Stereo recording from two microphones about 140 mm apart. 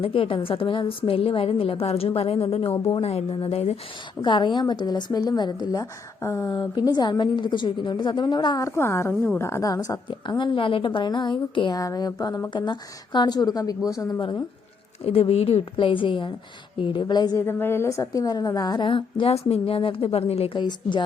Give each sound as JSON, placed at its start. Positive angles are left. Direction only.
{"t": 0.0, "sound": "a woman's voice", "side_deg": 40}
{"t": 4.2, "sound": "a woman's voice", "side_deg": 35}
{"t": 15.0, "sound": "a woman's voice", "side_deg": 45}
{"t": 17.4, "sound": "a woman's voice", "side_deg": 15}
{"t": 20.6, "sound": "a woman's voice", "side_deg": 30}